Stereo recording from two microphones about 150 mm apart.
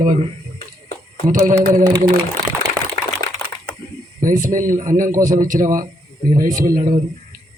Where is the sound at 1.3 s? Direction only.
60° right (ahead or behind).